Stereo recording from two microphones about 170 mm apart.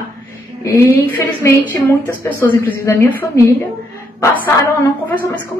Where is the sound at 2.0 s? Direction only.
15° left (ahead or behind).